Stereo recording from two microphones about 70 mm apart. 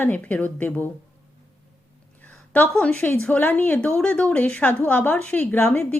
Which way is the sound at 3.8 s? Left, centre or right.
Centre.